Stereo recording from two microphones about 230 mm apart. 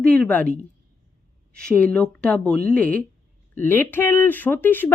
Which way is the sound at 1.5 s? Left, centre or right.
Centre.